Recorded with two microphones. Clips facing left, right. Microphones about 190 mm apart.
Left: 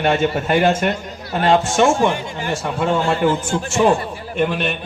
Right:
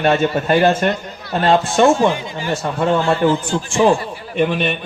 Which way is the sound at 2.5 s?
10° left (ahead or behind).